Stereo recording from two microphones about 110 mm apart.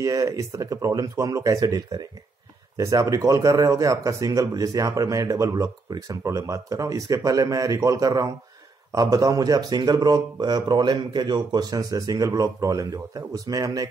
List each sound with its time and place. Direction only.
0.0 s speech: 30° right (ahead or behind)